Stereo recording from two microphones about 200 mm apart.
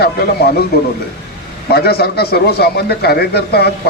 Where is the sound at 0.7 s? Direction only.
50° left (ahead or behind).